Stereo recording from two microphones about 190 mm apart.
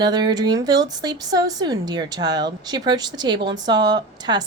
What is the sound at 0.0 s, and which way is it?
A woman's voice, 20° right (ahead or behind).